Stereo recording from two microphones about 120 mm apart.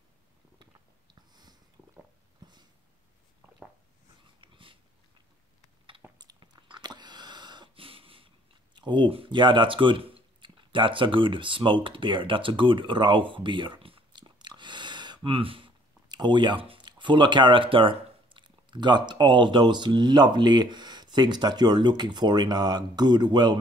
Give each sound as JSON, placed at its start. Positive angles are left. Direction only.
{"t": 0.6, "sound": "a sound", "side_deg": -40}
{"t": 4.4, "sound": "dog", "side_deg": -45}
{"t": 6.1, "sound": "chewing", "side_deg": -35}
{"t": 8.7, "sound": "speech", "side_deg": -40}